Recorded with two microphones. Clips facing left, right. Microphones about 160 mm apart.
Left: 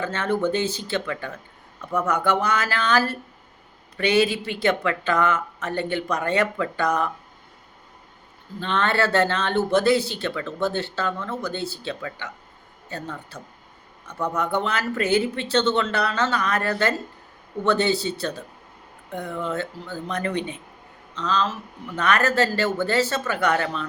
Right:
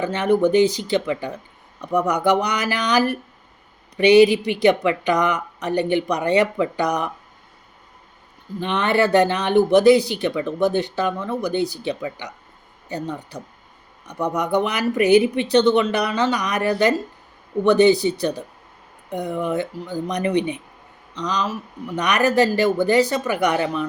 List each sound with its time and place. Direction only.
0.0 s speech: 15° right (ahead or behind)
8.6 s speech: 15° right (ahead or behind)